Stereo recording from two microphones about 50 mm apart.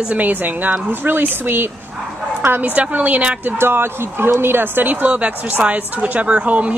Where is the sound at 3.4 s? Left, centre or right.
Right.